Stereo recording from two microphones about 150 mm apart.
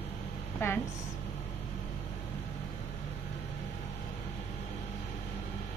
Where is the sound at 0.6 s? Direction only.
15° left (ahead or behind).